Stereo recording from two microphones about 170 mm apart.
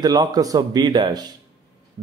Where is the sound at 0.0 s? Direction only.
25° right (ahead or behind).